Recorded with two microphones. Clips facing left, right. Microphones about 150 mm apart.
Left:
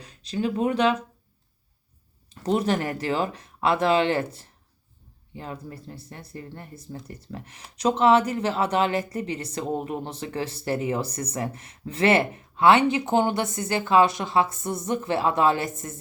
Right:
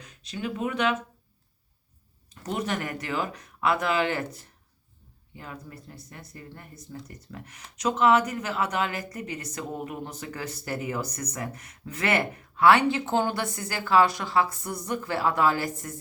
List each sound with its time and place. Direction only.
0.0 s speech: 35° left (ahead or behind)
2.3 s speech: 30° left (ahead or behind)